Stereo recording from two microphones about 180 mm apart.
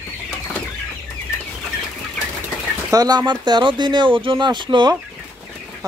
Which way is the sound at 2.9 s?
20° right (ahead or behind).